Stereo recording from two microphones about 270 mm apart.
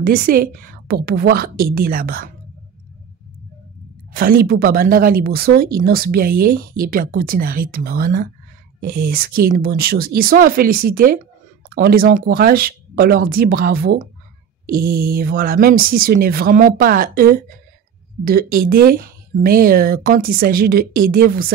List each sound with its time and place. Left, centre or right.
0.0 s speech: right
4.1 s speech: right